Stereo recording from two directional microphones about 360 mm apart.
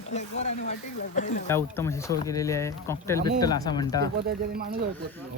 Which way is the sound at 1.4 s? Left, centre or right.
Centre.